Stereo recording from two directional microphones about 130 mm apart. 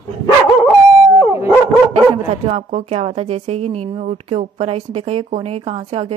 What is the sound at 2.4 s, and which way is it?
A woman's voice, 55° right (ahead or behind).